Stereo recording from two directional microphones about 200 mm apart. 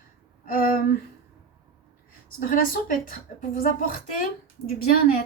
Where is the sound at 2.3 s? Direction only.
45° left (ahead or behind).